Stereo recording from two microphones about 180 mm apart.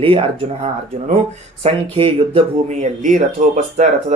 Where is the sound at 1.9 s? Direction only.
30° right (ahead or behind).